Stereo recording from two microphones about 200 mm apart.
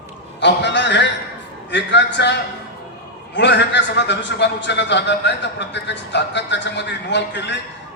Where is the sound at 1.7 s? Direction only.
65° left (ahead or behind).